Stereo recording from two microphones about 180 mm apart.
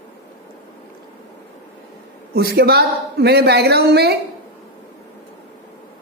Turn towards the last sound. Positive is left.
turn(degrees=-65)  # may be behind; listen again after turning